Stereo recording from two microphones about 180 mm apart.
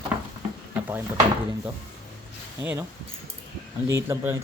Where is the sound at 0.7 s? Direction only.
10° right (ahead or behind).